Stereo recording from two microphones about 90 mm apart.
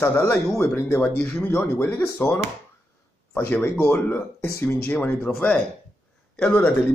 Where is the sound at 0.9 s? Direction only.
15° left (ahead or behind).